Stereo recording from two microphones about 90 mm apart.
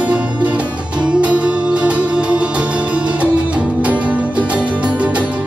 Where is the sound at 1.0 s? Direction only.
15° right (ahead or behind).